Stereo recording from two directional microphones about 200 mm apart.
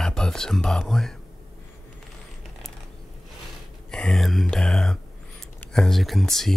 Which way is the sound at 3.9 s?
5° left (ahead or behind).